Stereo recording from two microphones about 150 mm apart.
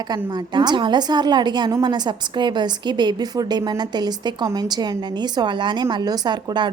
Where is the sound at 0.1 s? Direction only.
30° right (ahead or behind).